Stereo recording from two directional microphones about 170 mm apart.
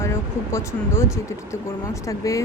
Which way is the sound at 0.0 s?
15° left (ahead or behind).